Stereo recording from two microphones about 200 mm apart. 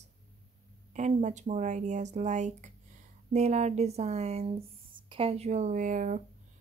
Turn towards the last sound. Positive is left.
turn(degrees=-40)  # may be behind; listen again after turning